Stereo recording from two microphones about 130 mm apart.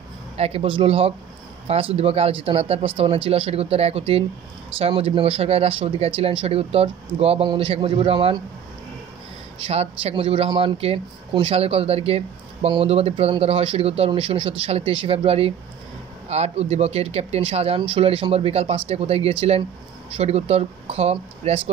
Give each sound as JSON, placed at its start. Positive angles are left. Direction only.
{"t": 0.4, "sound": "speech", "side_deg": -50}
{"t": 9.6, "sound": "speech", "side_deg": -50}